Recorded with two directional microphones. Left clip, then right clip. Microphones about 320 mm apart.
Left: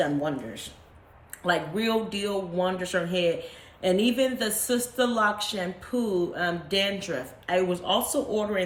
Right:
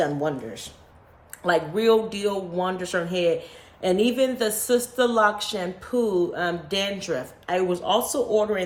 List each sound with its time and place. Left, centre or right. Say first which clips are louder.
0.0 s speech: right 2 dB; centre